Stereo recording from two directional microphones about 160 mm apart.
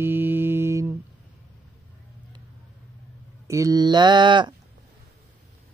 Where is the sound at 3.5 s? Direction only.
20° right (ahead or behind).